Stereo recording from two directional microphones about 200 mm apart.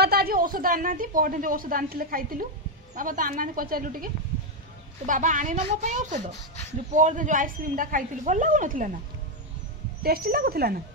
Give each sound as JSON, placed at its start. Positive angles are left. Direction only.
{"t": 0.0, "sound": "a woman's voice", "side_deg": -50}
{"t": 10.0, "sound": "speech", "side_deg": -50}